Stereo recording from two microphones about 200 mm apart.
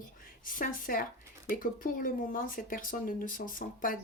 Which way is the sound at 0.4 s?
45° left (ahead or behind).